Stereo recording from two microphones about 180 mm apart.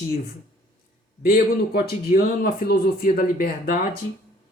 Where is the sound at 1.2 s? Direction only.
55° left (ahead or behind).